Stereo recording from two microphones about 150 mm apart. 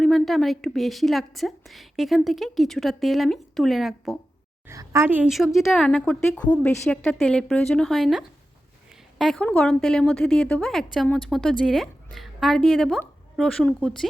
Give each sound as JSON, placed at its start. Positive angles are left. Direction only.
{"t": 0.0, "sound": "a woman's voice", "side_deg": 0}
{"t": 4.7, "sound": "a woman's voice", "side_deg": -20}